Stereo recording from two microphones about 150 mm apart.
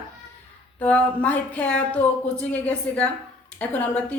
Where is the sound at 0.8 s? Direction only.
10° left (ahead or behind).